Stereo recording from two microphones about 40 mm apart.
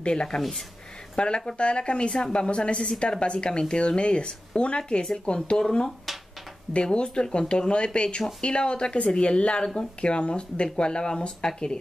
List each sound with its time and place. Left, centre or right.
0.0 s speech: left
5.6 s speech: centre